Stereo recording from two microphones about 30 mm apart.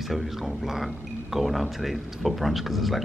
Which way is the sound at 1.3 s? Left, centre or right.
Centre.